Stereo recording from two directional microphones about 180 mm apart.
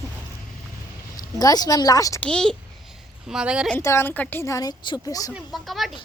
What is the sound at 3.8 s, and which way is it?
A woman's voice, 15° left (ahead or behind).